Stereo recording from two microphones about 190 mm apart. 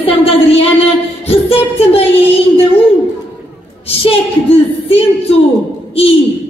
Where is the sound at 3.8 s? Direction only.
30° left (ahead or behind).